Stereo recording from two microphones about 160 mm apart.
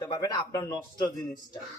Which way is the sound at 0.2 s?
25° left (ahead or behind).